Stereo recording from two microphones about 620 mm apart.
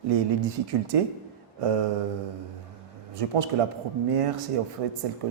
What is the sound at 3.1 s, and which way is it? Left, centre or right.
Speech, right.